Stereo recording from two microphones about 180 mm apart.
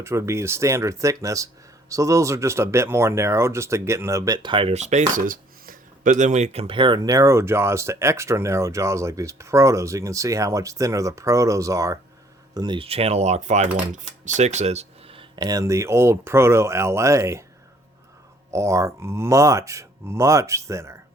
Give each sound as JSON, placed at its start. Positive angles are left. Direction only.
{"t": 0.0, "sound": "speech", "side_deg": -15}
{"t": 18.5, "sound": "speech", "side_deg": -15}